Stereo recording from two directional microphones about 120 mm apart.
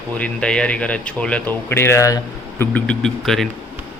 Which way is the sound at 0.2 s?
10° left (ahead or behind).